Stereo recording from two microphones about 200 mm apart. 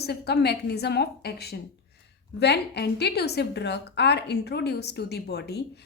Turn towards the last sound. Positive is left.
turn(degrees=55)  # may be behind; listen again after turning